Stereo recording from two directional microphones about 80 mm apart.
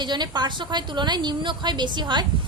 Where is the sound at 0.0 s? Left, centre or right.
Right.